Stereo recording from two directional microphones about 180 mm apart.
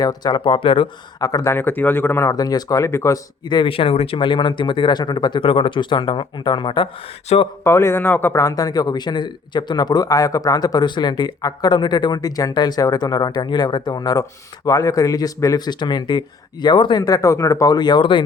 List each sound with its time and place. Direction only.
0.0 s a man's voice: 20° left (ahead or behind)
7.6 s a man's voice: 15° left (ahead or behind)